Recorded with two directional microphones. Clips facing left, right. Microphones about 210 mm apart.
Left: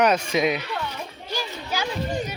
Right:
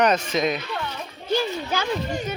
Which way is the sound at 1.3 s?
55° right (ahead or behind).